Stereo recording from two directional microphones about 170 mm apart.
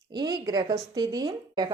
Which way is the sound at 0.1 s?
25° right (ahead or behind).